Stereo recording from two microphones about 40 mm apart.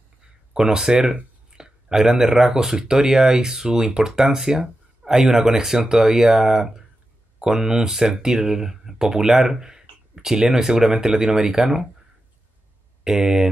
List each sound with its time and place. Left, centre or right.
0.5 s speech: centre
13.0 s speech: centre